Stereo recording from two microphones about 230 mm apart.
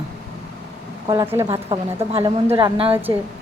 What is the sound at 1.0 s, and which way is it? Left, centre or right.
A woman's voice, centre.